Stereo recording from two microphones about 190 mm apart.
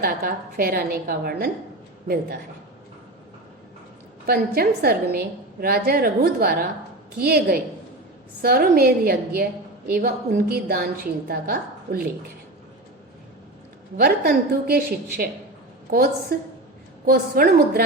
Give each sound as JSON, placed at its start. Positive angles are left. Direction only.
{"t": 0.0, "sound": "a woman's voice", "side_deg": -50}
{"t": 4.3, "sound": "a woman's voice", "side_deg": -55}
{"t": 14.0, "sound": "a woman's voice", "side_deg": -55}